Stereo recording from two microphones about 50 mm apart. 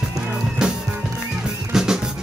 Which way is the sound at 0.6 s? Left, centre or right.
Centre.